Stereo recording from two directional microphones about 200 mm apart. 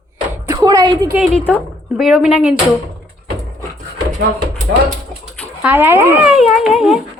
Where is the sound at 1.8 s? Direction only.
Centre (ahead or behind).